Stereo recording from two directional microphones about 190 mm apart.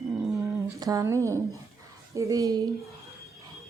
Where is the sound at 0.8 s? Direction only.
20° right (ahead or behind).